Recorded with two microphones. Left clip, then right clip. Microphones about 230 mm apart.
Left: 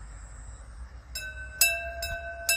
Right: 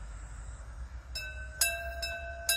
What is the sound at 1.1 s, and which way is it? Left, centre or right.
Music, left.